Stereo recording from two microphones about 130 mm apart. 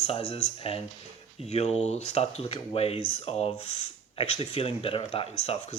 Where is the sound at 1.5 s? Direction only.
55° left (ahead or behind).